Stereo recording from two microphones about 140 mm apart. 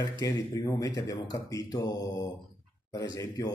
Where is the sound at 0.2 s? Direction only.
25° left (ahead or behind).